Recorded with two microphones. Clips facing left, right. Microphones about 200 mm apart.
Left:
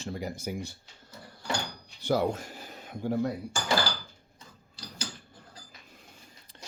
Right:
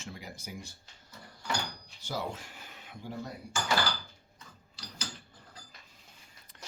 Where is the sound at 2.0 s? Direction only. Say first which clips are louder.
Left 10 dB; 55° left (ahead or behind).